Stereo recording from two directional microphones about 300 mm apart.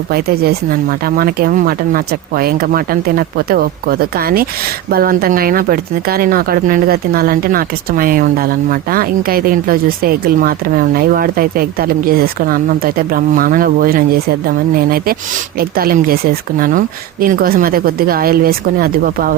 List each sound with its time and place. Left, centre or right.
0.1 s speech: right